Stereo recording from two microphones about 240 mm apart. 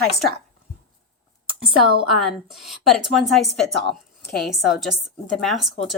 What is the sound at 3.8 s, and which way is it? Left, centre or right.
Speech, left.